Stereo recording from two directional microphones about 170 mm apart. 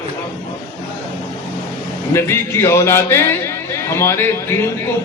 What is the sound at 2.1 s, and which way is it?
A man's voice, 15° left (ahead or behind).